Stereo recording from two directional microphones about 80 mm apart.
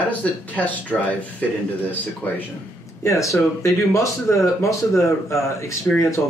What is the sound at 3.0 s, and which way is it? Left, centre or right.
Speech, left.